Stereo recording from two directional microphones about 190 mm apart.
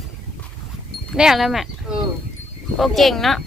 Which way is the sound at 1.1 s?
Centre (ahead or behind).